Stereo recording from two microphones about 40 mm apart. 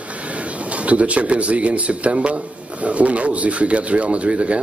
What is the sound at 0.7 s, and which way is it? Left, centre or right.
A man's voice, right.